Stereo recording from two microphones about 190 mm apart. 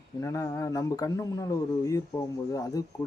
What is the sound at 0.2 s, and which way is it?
Speech, 15° left (ahead or behind).